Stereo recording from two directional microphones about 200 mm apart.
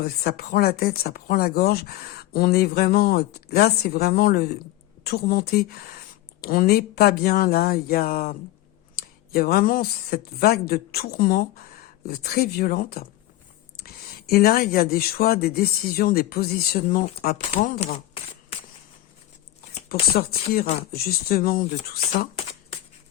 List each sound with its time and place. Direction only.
0.0 s speech: 50° left (ahead or behind); by 18.0 s 35° left (ahead or behind)
19.9 s speech: 50° left (ahead or behind)